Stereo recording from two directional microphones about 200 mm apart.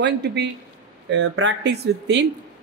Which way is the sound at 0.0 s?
55° right (ahead or behind).